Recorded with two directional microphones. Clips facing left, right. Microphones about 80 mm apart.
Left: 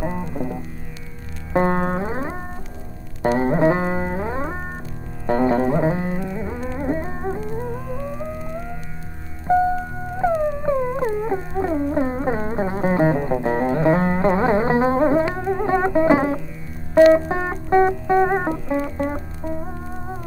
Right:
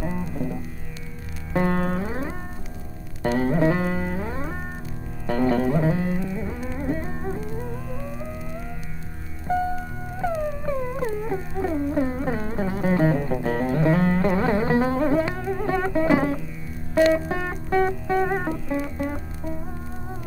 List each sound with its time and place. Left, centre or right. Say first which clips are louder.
0.0 s music: left 3 dB; left
10.1 s music: left 6 dB; left